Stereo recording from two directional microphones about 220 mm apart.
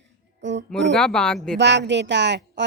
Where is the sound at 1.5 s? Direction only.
50° right (ahead or behind).